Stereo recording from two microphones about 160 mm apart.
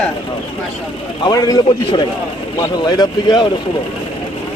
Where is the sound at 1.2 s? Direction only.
25° left (ahead or behind).